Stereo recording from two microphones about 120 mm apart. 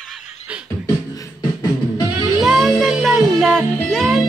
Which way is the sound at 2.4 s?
Centre (ahead or behind).